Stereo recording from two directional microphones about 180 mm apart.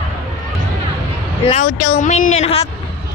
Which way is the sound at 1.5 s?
40° left (ahead or behind).